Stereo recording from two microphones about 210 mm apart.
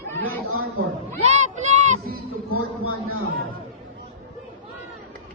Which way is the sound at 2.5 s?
90° right.